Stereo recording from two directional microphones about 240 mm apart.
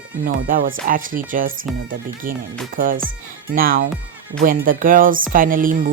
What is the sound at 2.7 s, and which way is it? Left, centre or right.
A woman's voice, right.